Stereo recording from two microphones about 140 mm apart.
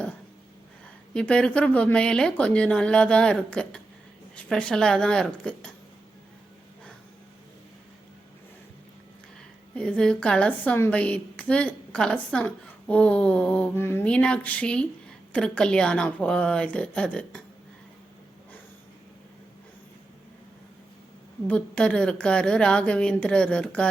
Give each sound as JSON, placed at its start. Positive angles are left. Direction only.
{"t": 1.1, "sound": "a woman's voice", "side_deg": 10}
{"t": 9.7, "sound": "a woman's voice", "side_deg": 5}
{"t": 21.4, "sound": "a woman's voice", "side_deg": 10}